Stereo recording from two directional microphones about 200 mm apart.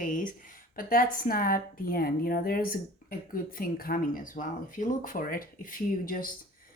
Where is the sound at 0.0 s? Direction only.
40° left (ahead or behind).